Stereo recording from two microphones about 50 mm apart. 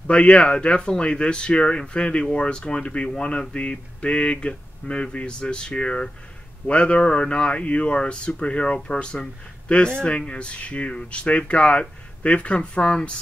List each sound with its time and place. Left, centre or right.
0.0 s speech: left